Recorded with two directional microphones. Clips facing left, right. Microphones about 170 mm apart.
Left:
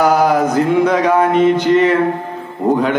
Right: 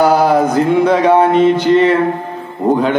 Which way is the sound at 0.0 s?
30° right (ahead or behind).